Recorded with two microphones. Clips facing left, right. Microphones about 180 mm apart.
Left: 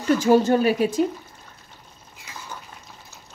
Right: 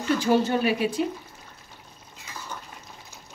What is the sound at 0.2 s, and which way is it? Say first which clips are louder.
Speech: left 5 dB; 45° left (ahead or behind).